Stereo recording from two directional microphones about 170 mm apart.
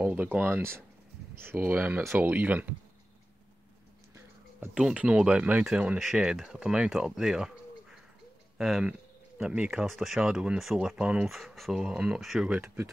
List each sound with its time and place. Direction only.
0.0 s speech: 10° right (ahead or behind)
4.6 s speech: 5° right (ahead or behind)
12.6 s speech: 15° right (ahead or behind)